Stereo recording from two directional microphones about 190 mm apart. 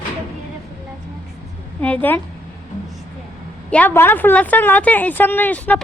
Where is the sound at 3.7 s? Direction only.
10° left (ahead or behind).